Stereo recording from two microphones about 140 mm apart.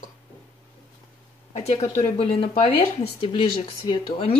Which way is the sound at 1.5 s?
50° left (ahead or behind).